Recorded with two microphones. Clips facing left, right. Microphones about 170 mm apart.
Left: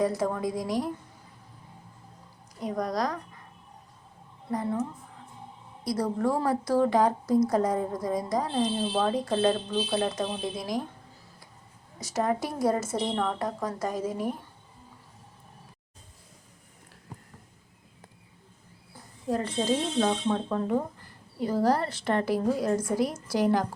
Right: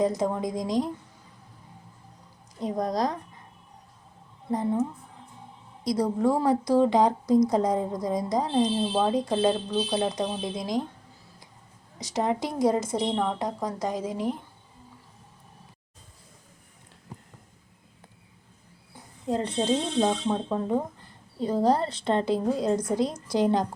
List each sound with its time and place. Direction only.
0.0 s a woman's voice: 20° right (ahead or behind)
2.6 s a woman's voice: 25° right (ahead or behind)
4.5 s a woman's voice: 20° right (ahead or behind)
11.9 s a woman's voice: 15° right (ahead or behind)
18.9 s a woman's voice: 20° right (ahead or behind)